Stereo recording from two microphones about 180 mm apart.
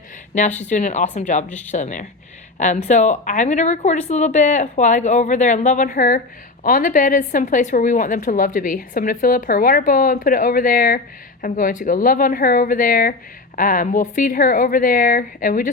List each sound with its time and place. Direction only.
0.3 s a woman's voice: 40° left (ahead or behind)
1.5 s speech: 10° left (ahead or behind)
1.7 s a woman's voice: 45° left (ahead or behind)